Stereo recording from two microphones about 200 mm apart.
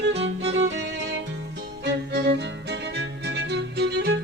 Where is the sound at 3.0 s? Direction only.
60° right (ahead or behind).